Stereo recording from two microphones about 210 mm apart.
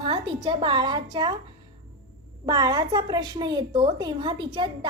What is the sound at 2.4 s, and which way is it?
A woman's voice, 20° right (ahead or behind).